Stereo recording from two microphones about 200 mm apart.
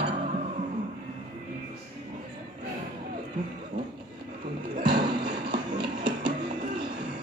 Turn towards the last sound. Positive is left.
turn(degrees=-25)  # may be behind; listen again after turning